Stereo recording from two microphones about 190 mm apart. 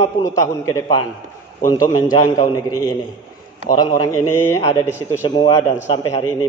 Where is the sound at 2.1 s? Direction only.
20° left (ahead or behind).